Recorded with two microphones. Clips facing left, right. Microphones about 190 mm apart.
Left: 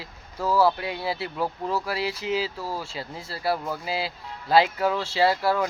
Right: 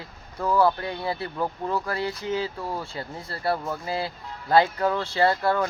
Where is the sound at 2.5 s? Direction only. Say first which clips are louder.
Right 1 dB; 5° left (ahead or behind).